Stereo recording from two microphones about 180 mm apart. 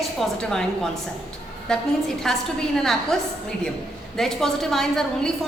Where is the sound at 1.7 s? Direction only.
5° left (ahead or behind).